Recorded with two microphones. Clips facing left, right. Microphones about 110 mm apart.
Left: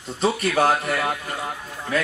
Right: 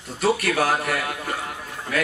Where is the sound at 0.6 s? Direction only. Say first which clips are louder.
Left 3 dB; 25° left (ahead or behind).